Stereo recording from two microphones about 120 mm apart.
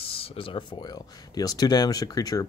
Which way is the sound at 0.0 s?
50° left (ahead or behind).